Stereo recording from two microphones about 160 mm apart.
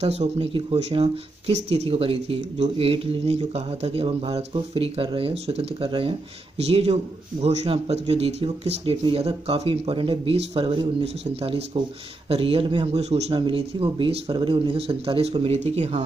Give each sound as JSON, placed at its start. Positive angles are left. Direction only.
{"t": 0.0, "sound": "speech", "side_deg": -40}